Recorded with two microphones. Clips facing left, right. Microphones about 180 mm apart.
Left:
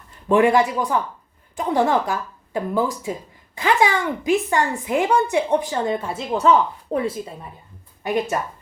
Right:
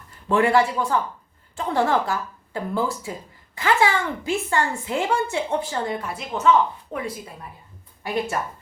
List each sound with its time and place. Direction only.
0.3 s a woman's voice: 15° left (ahead or behind)